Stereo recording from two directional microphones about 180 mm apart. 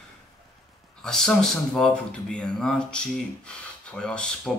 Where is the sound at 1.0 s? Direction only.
5° left (ahead or behind).